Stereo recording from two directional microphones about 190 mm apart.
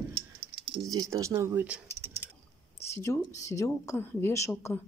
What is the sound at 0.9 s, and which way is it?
Speech, 20° right (ahead or behind).